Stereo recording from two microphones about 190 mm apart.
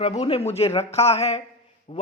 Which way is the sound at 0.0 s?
35° left (ahead or behind).